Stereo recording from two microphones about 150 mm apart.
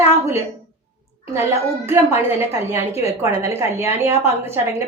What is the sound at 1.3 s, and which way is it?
A woman's voice, 20° right (ahead or behind).